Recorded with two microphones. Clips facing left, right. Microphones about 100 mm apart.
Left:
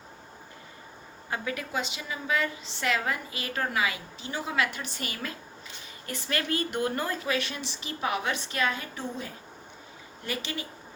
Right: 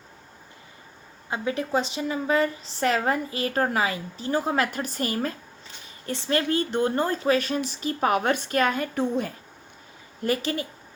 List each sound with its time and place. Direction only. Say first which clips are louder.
1.3 s a woman's voice: right 7 dB; 30° right (ahead or behind); by 9.3 s 55° right (ahead or behind)
10.2 s a woman's voice: right 9 dB; 40° right (ahead or behind)